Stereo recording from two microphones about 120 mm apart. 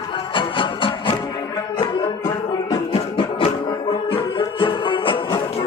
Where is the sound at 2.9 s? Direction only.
45° left (ahead or behind).